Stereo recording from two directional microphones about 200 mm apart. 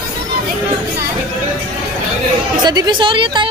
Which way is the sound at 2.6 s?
20° right (ahead or behind).